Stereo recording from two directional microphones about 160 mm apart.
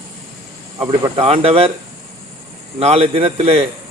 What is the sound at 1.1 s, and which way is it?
Speech, 40° right (ahead or behind).